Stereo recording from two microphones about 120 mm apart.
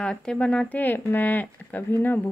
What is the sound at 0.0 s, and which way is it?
Speech, 5° left (ahead or behind).